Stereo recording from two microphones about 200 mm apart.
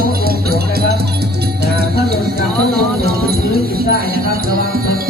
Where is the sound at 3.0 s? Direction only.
50° right (ahead or behind).